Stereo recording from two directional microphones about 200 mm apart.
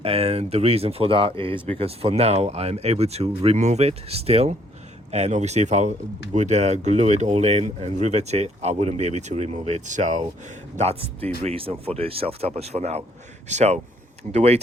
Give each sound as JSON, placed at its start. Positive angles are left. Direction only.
{"t": 0.0, "sound": "speech", "side_deg": -30}